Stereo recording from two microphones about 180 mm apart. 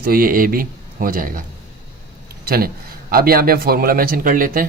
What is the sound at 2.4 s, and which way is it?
Speech, 55° right (ahead or behind).